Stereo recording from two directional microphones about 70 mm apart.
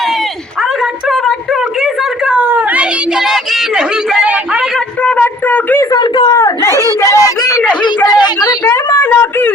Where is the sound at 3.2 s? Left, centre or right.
Centre.